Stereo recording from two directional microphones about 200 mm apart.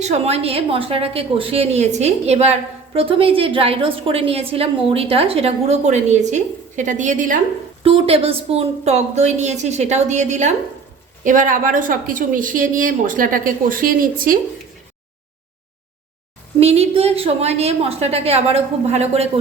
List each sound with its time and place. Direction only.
0.0 s a woman's voice: 30° right (ahead or behind)
7.9 s a woman's voice: 30° right (ahead or behind)
16.6 s a woman's voice: 30° right (ahead or behind)